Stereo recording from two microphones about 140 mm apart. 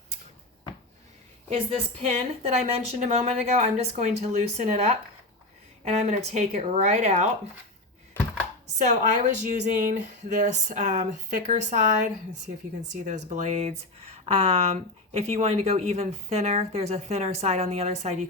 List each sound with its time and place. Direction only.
2.0 s speech: 45° right (ahead or behind)
8.6 s speech: 55° right (ahead or behind)